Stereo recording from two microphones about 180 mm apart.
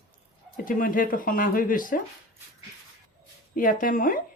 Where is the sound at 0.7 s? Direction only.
50° left (ahead or behind).